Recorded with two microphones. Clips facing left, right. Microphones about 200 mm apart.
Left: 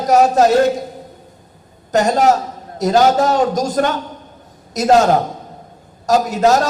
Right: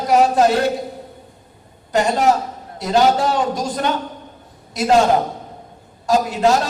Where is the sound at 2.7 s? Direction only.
45° left (ahead or behind).